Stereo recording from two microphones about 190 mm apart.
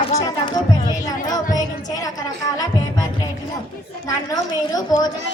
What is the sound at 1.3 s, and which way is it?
Music, 20° left (ahead or behind).